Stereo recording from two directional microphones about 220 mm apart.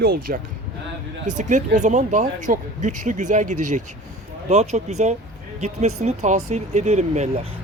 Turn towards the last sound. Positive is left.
turn(degrees=-30)  # may be behind; listen again after turning